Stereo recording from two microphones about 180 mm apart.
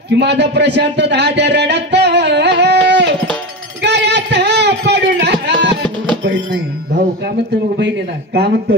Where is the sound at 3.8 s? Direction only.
70° right (ahead or behind).